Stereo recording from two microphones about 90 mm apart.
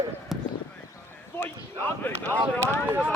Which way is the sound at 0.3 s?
5° right (ahead or behind).